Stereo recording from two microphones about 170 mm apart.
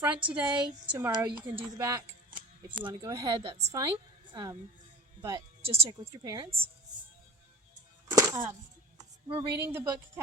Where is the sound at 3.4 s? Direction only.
35° right (ahead or behind).